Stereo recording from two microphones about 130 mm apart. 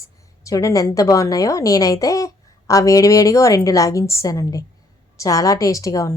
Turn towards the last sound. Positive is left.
turn(degrees=25)  # may be behind; listen again after turning